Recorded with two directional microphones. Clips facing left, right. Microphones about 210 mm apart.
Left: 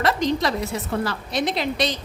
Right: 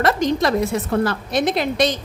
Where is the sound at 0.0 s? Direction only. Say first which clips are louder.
Right 3 dB; 50° right (ahead or behind).